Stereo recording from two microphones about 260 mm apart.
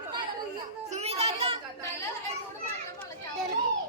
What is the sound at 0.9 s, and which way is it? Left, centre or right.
Children playing, right.